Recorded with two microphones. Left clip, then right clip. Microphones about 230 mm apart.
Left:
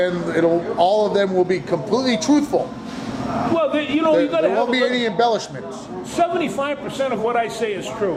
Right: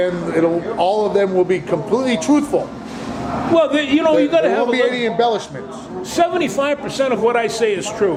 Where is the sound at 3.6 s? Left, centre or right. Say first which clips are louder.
Right 5 dB; right.